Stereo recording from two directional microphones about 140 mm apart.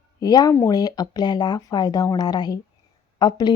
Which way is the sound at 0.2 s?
25° left (ahead or behind).